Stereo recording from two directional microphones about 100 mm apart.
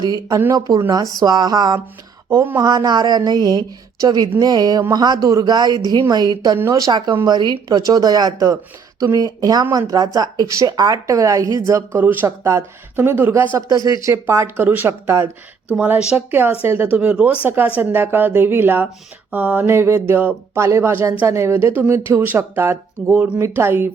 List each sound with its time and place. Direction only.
0.3 s speech: 30° right (ahead or behind)
2.3 s speech: 20° right (ahead or behind)
2.6 s a woman's voice: 40° right (ahead or behind)
11.9 s speech: 20° right (ahead or behind)
13.6 s speech: 40° right (ahead or behind)
14.1 s speech: 25° right (ahead or behind)
15.7 s speech: 10° right (ahead or behind)